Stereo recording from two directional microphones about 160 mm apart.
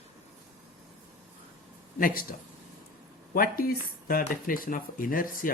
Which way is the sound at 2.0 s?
60° left (ahead or behind).